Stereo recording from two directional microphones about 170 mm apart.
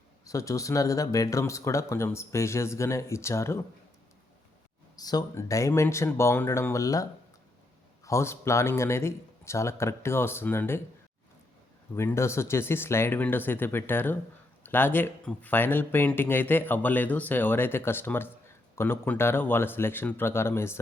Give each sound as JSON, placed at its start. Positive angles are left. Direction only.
{"t": 0.3, "sound": "speech", "side_deg": 20}
{"t": 4.9, "sound": "speech", "side_deg": 20}
{"t": 11.9, "sound": "speech", "side_deg": 15}